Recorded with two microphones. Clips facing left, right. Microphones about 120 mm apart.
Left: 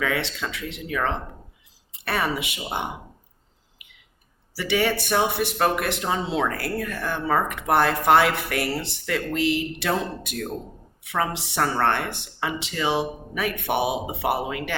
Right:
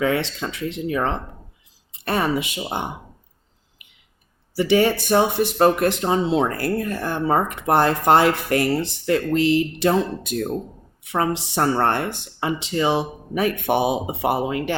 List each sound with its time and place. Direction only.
0.0 s speech: 30° right (ahead or behind)
2.6 s speech: 30° right (ahead or behind)
4.7 s speech: 35° right (ahead or behind)